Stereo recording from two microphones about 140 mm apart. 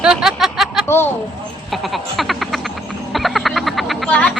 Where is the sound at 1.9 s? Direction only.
Centre (ahead or behind).